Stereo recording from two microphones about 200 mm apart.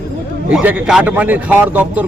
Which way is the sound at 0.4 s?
10° right (ahead or behind).